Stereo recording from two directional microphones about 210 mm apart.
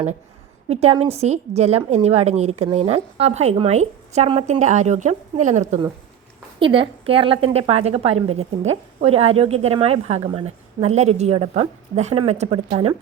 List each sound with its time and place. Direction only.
0.7 s a woman's voice: 30° right (ahead or behind)